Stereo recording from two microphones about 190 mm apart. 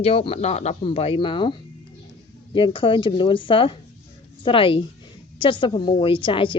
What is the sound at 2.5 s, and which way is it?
A woman's voice, 25° left (ahead or behind).